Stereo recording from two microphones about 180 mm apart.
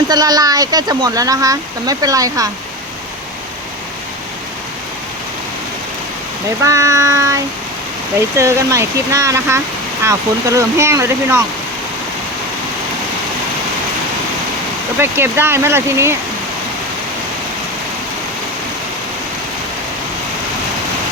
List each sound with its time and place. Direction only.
0.1 s speech: 20° right (ahead or behind)
6.6 s speech: 15° right (ahead or behind)
14.9 s speech: 15° right (ahead or behind)